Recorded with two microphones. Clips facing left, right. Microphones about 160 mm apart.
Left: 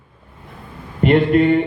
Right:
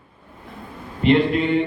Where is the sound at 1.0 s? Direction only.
50° left (ahead or behind).